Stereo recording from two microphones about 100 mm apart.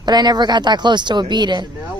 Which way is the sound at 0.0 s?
45° right (ahead or behind).